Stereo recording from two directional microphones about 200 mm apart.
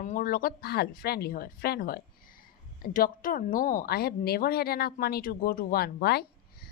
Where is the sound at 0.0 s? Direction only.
40° left (ahead or behind).